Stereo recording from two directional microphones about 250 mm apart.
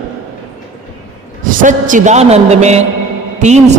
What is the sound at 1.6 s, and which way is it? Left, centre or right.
A man's voice, right.